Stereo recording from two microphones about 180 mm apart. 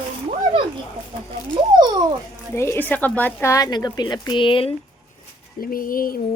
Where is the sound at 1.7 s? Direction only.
25° right (ahead or behind).